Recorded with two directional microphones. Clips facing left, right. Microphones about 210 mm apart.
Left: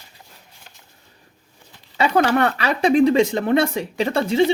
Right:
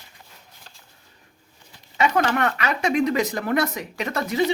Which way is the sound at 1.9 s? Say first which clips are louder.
Left 4 dB; 30° left (ahead or behind).